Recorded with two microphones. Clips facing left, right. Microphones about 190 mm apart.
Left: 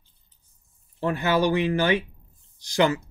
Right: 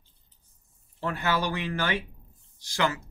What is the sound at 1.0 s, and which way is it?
Speech, 20° left (ahead or behind).